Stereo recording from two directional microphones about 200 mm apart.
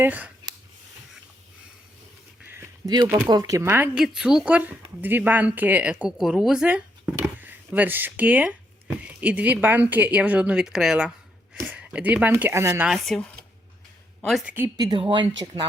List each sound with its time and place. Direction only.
0.0 s a woman's voice: 10° right (ahead or behind)
2.4 s a sound: 10° right (ahead or behind)
3.2 s a woman's voice: 20° right (ahead or behind)